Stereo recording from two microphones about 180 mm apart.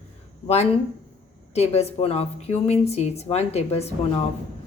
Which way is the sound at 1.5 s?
35° left (ahead or behind).